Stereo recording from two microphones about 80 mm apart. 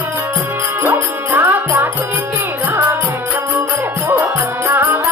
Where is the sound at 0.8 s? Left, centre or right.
Right.